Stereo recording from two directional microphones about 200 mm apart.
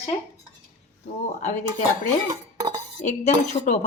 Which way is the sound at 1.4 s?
40° left (ahead or behind).